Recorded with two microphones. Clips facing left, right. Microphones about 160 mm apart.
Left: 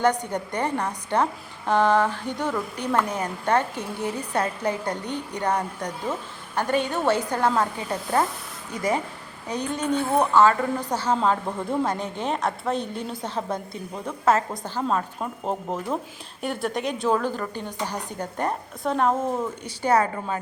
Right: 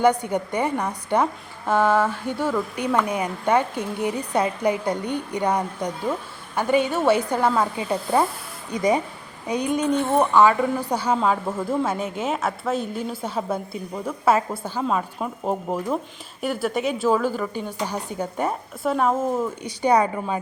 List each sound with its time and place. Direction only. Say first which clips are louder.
0.0 s a woman's voice: right 3 dB; 10° right (ahead or behind)
9.8 s a woman's voice: right 1 dB; 5° left (ahead or behind)
10.3 s a woman's voice: right 1 dB; 10° right (ahead or behind)
19.6 s a woman's voice: right 2 dB; 15° right (ahead or behind)